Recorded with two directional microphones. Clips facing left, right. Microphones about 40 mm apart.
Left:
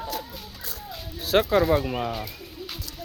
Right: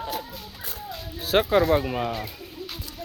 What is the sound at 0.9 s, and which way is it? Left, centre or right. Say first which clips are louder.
Music: even; centre.